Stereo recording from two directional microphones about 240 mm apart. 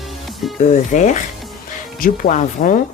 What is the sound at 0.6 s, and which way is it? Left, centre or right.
Speech, left.